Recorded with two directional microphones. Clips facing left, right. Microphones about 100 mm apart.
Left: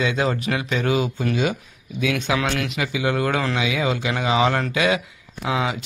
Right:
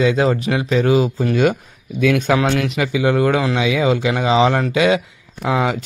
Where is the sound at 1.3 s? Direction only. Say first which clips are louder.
Right 6 dB; 55° right (ahead or behind); by 5.0 s 25° right (ahead or behind).